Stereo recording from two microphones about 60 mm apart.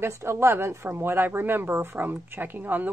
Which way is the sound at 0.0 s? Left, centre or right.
Right.